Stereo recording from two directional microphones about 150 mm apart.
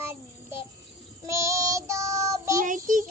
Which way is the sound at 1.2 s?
20° right (ahead or behind).